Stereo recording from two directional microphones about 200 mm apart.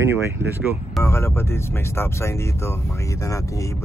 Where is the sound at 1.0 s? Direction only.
15° left (ahead or behind).